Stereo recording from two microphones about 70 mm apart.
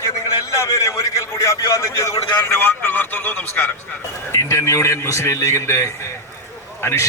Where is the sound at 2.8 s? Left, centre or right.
Left.